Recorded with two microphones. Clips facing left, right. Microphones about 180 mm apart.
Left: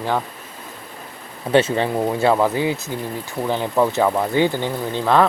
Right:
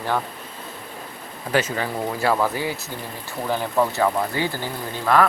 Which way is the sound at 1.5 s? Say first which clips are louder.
Left 6 dB; 25° left (ahead or behind).